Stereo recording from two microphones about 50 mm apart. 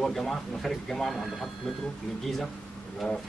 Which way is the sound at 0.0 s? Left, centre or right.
Centre.